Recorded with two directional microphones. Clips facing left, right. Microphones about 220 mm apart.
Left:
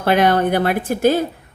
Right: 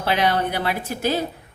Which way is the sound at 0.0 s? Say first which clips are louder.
Left 6 dB; 50° left (ahead or behind).